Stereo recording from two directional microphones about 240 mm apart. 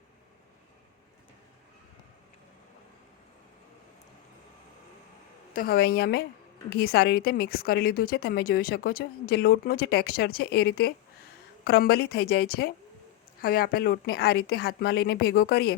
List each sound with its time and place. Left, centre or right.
5.5 s a woman's voice: left